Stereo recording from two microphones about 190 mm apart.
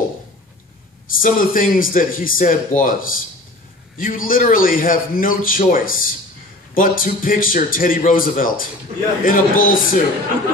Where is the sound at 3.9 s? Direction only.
45° left (ahead or behind).